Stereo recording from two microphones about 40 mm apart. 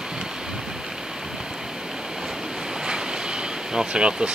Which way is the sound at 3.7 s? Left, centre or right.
Right.